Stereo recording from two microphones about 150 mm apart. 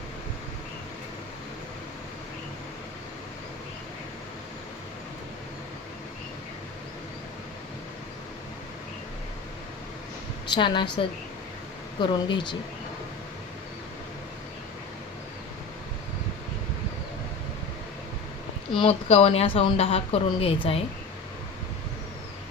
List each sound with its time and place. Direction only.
10.5 s speech: 30° left (ahead or behind)
18.8 s speech: 40° left (ahead or behind)